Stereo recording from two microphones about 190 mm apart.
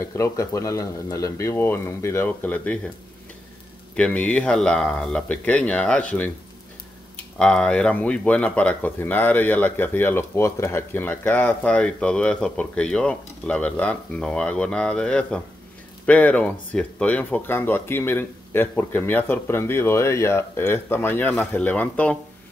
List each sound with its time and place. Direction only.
0.0 s speech: 15° left (ahead or behind)
3.9 s speech: 5° left (ahead or behind)
7.3 s speech: 5° left (ahead or behind)